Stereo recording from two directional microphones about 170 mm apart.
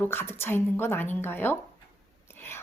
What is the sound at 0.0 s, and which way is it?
A woman's voice, 15° left (ahead or behind).